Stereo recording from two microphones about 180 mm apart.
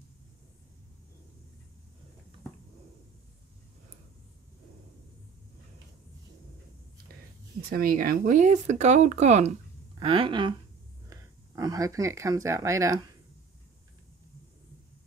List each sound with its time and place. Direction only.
7.7 s speech: 50° right (ahead or behind); by 13.1 s 20° right (ahead or behind)